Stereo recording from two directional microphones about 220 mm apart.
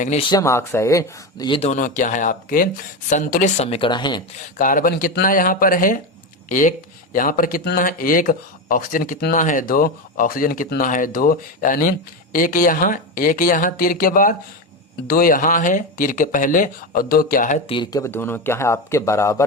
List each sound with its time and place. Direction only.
0.0 s speech: 30° left (ahead or behind)
0.3 s speech: 15° left (ahead or behind)
4.5 s speech: 40° left (ahead or behind)
17.7 s speech: 20° left (ahead or behind)